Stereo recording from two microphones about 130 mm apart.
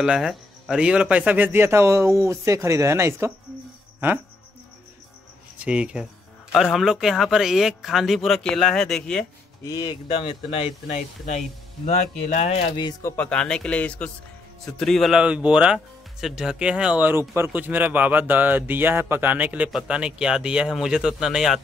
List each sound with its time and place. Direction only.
0.0 s speech: 5° right (ahead or behind); by 3.3 s 20° right (ahead or behind)
5.6 s speech: 10° right (ahead or behind)
9.7 s speech: 30° left (ahead or behind)
10.0 s speech: 40° left (ahead or behind)
13.0 s speech: 10° left (ahead or behind)